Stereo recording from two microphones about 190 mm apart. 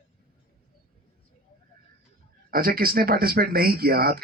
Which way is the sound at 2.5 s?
50° right (ahead or behind).